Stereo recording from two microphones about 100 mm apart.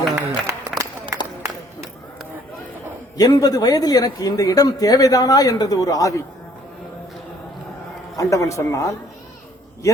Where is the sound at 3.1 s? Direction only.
40° left (ahead or behind).